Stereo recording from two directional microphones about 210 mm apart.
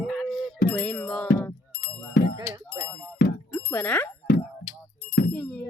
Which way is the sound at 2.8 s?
15° right (ahead or behind).